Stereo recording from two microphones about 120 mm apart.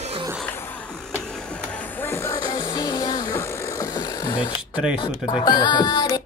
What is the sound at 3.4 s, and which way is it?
Vehicle, 25° left (ahead or behind).